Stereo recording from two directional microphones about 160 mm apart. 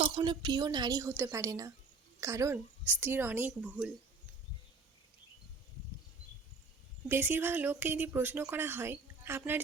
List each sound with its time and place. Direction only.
0.2 s a woman's voice: 25° right (ahead or behind); by 3.9 s 5° right (ahead or behind)
7.1 s speech: 15° right (ahead or behind)